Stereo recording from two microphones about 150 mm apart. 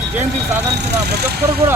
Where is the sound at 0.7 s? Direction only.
90° right.